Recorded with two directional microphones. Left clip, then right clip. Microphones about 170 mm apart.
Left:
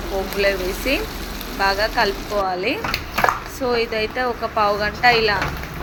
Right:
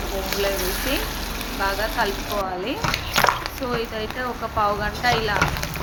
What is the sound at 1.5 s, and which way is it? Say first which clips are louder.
Speech: left 5 dB; 10° left (ahead or behind).